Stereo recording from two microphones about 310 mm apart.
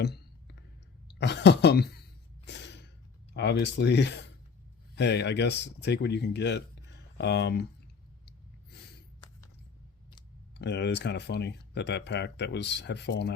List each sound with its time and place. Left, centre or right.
0.0 s clicking: left
1.0 s a sound: left
3.3 s speech: left
10.6 s speech: left